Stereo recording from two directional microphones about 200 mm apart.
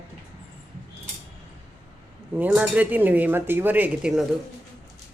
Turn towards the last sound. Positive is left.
turn(degrees=-5)  # may be behind; listen again after turning